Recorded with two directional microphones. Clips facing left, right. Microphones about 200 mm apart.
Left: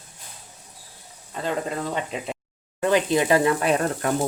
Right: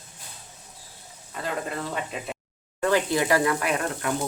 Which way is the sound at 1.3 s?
25° left (ahead or behind).